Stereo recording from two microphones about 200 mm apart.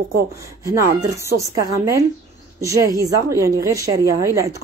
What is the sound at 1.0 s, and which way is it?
A woman's voice, 15° right (ahead or behind).